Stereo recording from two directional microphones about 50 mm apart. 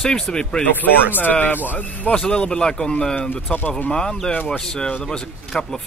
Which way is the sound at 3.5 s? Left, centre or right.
Left.